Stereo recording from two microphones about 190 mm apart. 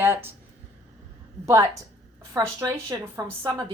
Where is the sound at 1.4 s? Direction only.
15° right (ahead or behind).